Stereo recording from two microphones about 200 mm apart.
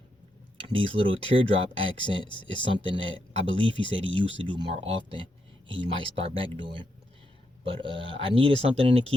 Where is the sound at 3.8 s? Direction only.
70° right (ahead or behind).